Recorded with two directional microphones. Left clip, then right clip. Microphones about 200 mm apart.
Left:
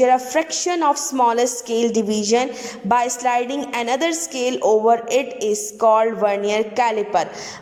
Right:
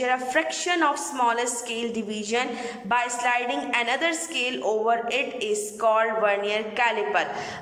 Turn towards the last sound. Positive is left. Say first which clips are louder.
# left 5 dB
turn(degrees=25)  # may be behind; listen again after turning